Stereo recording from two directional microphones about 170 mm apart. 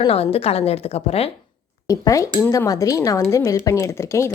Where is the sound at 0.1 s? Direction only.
35° left (ahead or behind).